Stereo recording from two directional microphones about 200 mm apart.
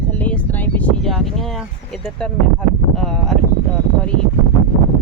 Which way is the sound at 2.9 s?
Centre (ahead or behind).